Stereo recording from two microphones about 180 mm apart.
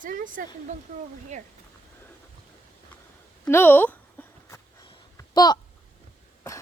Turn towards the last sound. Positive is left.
turn(degrees=20)  # may be behind; listen again after turning